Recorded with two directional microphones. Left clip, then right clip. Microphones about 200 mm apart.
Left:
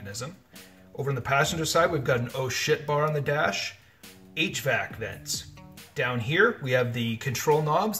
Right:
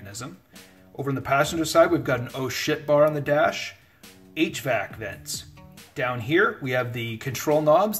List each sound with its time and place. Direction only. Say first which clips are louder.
0.0 s music: left 1 dB; 40° right (ahead or behind)
1.0 s speech: right 2 dB; 40° right (ahead or behind)